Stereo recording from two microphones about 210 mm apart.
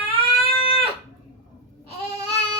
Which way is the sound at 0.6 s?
25° left (ahead or behind).